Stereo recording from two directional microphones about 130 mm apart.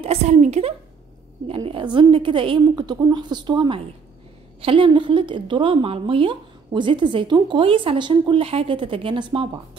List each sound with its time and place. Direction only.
0.0 s a woman's voice: 55° right (ahead or behind)
1.5 s a woman's voice: 40° right (ahead or behind)